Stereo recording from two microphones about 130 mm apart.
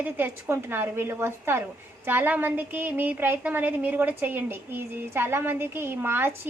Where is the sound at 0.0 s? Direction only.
15° right (ahead or behind).